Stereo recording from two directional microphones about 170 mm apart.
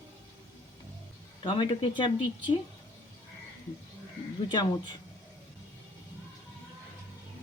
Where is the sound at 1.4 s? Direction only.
30° left (ahead or behind).